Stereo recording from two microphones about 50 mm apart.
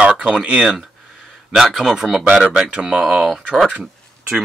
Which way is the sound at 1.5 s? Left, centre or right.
Centre.